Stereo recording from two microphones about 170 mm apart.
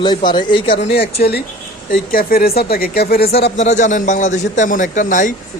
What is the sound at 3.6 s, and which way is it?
A man's voice, 45° left (ahead or behind).